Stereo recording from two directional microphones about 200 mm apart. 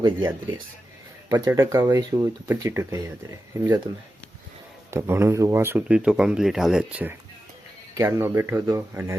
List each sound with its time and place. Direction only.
0.0 s speech: 20° right (ahead or behind)
4.9 s speech: 15° right (ahead or behind)